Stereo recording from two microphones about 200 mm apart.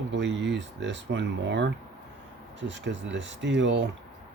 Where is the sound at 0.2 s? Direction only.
65° right (ahead or behind).